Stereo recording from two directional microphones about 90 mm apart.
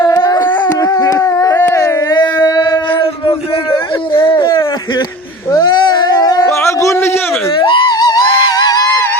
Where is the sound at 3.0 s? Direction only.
65° left (ahead or behind).